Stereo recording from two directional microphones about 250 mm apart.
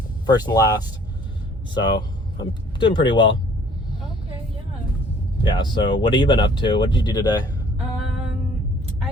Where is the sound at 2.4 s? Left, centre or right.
Centre.